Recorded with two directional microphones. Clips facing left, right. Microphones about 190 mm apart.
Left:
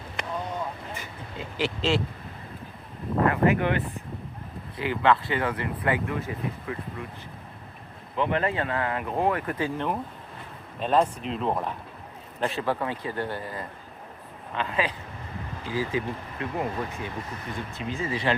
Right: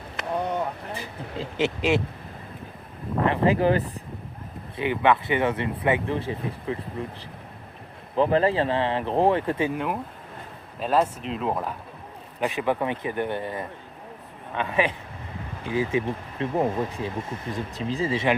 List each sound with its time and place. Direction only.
0.2 s vehicle: centre (ahead or behind)
0.9 s speech: 25° right (ahead or behind)
3.2 s speech: 30° right (ahead or behind)
4.8 s speech: 20° right (ahead or behind)
8.1 s speech: 35° right (ahead or behind)
9.7 s speech: 5° right (ahead or behind)
12.4 s speech: 15° right (ahead or behind)